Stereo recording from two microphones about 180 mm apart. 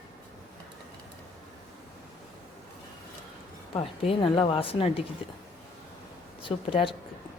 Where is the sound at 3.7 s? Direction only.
30° left (ahead or behind).